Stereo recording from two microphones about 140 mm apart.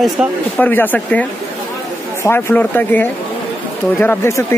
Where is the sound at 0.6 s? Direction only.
15° left (ahead or behind).